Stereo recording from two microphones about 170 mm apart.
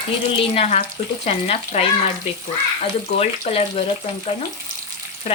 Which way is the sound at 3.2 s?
40° left (ahead or behind).